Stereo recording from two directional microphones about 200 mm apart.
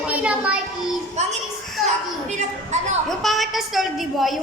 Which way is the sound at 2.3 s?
35° right (ahead or behind).